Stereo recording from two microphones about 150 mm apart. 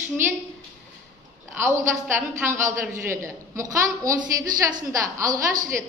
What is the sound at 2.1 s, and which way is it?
A woman's voice, 15° right (ahead or behind).